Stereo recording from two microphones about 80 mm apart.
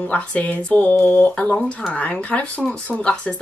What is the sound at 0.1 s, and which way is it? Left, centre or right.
Speech, centre.